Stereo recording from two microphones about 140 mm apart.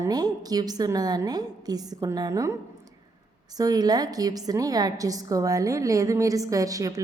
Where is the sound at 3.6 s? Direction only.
30° right (ahead or behind).